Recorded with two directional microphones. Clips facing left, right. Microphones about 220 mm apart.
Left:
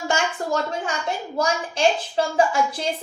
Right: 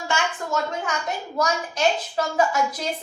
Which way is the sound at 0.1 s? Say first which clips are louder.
Left 2 dB; 30° left (ahead or behind).